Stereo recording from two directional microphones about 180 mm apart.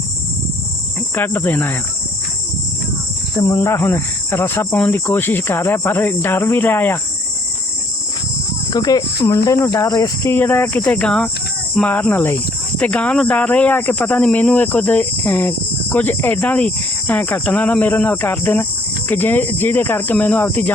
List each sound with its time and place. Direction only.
1.1 s speech: 10° left (ahead or behind)
3.3 s speech: 20° left (ahead or behind)
8.7 s speech: 20° left (ahead or behind)